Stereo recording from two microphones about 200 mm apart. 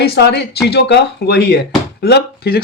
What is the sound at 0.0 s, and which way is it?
Speech, 55° left (ahead or behind).